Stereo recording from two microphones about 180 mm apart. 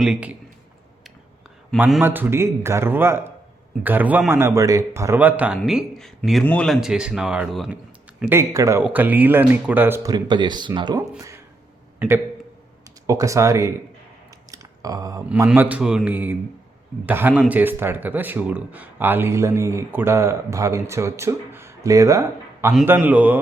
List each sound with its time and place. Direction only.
0.0 s speech: 5° right (ahead or behind)
1.8 s a man's voice: 10° right (ahead or behind)
8.2 s speech: 15° right (ahead or behind)
11.9 s speech: 15° right (ahead or behind)
14.5 s a sound: 20° right (ahead or behind)
15.3 s speech: 10° right (ahead or behind)